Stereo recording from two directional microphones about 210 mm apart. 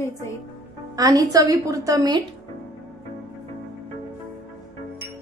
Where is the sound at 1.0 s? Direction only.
15° right (ahead or behind).